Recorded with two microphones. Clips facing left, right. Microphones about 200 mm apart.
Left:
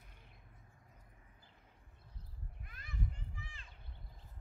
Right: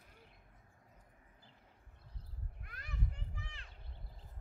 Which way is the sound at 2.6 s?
70° right (ahead or behind).